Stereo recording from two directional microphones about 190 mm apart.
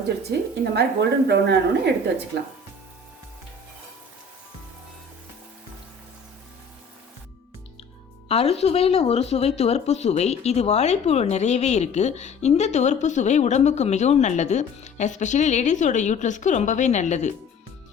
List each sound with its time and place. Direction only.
0.3 s a woman's voice: 60° right (ahead or behind)
8.3 s speech: 30° left (ahead or behind)